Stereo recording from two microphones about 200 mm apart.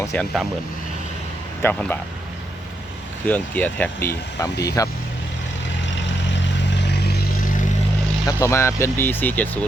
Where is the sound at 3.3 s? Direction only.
10° left (ahead or behind).